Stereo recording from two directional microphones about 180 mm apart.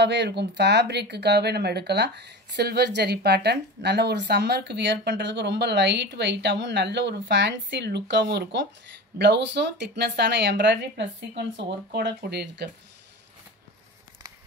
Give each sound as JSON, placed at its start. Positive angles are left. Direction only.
{"t": 0.0, "sound": "speech", "side_deg": -75}